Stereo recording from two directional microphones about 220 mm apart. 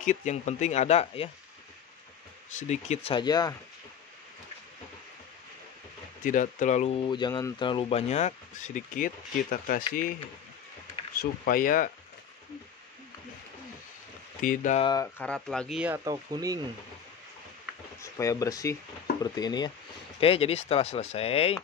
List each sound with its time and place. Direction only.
0.0 s speech: 35° left (ahead or behind)
2.7 s speech: 30° left (ahead or behind)
6.2 s speech: 35° left (ahead or behind)
7.1 s speech: 20° left (ahead or behind); by 9.8 s 40° left (ahead or behind)
11.1 s speech: 40° left (ahead or behind)
14.4 s speech: 35° left (ahead or behind)
14.8 s speech: 15° left (ahead or behind)
15.2 s speech: 5° left (ahead or behind)
16.0 s speech: 15° right (ahead or behind)
18.0 s speech: 15° left (ahead or behind)